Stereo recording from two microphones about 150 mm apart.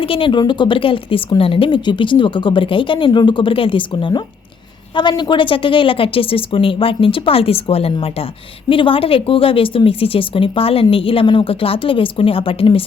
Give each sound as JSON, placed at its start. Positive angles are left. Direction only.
{"t": 0.0, "sound": "a woman's voice", "side_deg": 35}